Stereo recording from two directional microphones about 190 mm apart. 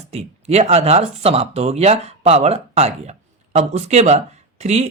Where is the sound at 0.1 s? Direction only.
35° right (ahead or behind).